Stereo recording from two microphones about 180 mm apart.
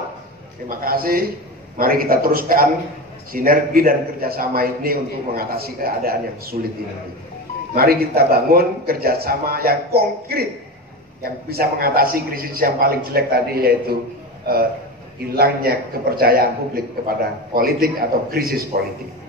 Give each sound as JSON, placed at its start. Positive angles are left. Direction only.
{"t": 0.7, "sound": "a man's voice", "side_deg": -55}
{"t": 7.7, "sound": "a man's voice", "side_deg": -55}